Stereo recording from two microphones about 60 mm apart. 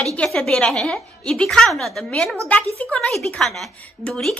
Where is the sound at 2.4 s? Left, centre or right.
Left.